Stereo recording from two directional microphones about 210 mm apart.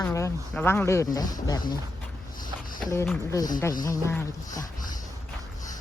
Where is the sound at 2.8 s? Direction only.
15° left (ahead or behind).